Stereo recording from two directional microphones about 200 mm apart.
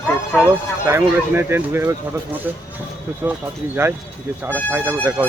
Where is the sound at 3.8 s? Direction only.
10° right (ahead or behind).